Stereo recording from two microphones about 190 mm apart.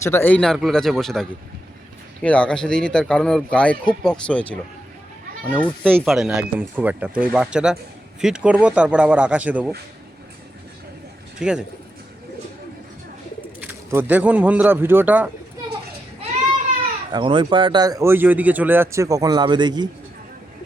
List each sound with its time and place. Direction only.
0.0 s a man's voice: 10° left (ahead or behind); by 9.7 s 5° right (ahead or behind)
11.3 s speech: 5° right (ahead or behind)
13.6 s speech: 10° right (ahead or behind)
17.1 s speech: 25° right (ahead or behind)